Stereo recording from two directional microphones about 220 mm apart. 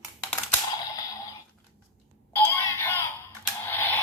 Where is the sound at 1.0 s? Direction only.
15° left (ahead or behind).